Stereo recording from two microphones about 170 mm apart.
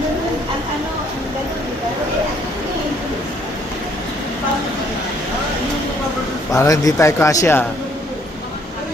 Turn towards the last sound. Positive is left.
turn(degrees=15)  # may be behind; listen again after turning